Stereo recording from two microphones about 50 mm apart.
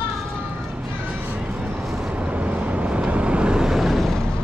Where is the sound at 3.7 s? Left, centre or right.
Centre.